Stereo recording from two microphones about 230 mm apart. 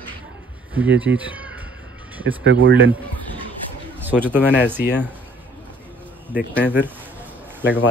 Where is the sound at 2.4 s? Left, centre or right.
Right.